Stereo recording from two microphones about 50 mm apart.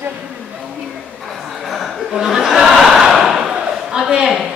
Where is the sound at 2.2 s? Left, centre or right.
Centre.